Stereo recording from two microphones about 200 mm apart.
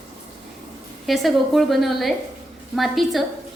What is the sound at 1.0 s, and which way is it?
A woman's voice, centre (ahead or behind).